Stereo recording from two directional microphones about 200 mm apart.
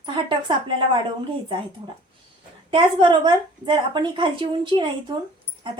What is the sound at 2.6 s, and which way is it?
Speech, 25° right (ahead or behind).